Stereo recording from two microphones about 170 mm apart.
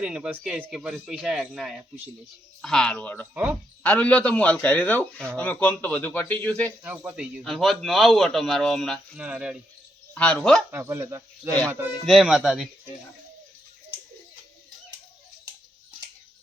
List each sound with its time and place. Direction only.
0.0 s a man's voice: 5° right (ahead or behind)
6.8 s speech: 10° right (ahead or behind)
10.2 s speech: 5° left (ahead or behind)
10.7 s speech: 15° right (ahead or behind)
12.0 s speech: centre (ahead or behind)